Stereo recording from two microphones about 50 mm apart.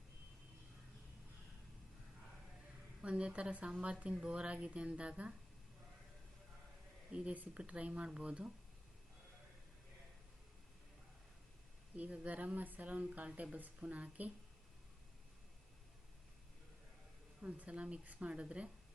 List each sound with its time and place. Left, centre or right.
3.0 s speech: right
7.1 s speech: right
12.1 s speech: right
17.4 s speech: right